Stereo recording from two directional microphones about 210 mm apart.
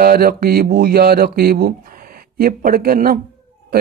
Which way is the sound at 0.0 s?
45° right (ahead or behind).